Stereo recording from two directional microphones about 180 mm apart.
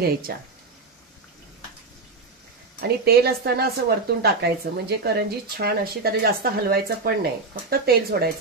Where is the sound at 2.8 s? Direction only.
60° right (ahead or behind).